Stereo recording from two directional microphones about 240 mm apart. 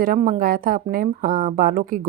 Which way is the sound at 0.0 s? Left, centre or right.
Right.